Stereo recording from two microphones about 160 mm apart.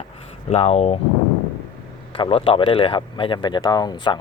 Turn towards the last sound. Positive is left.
turn(degrees=25)  # may be behind; listen again after turning